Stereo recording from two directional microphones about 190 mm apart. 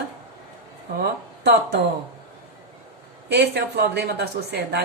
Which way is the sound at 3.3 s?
60° right (ahead or behind).